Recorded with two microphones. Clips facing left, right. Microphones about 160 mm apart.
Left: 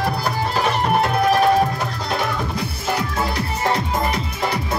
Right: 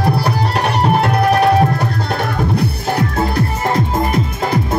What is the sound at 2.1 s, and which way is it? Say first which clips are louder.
Music: right 4 dB; 60° right (ahead or behind).